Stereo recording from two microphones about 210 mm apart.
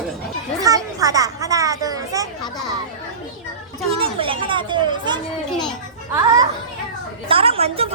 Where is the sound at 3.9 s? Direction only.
25° right (ahead or behind).